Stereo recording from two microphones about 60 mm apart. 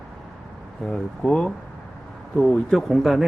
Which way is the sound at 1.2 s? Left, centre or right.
Centre.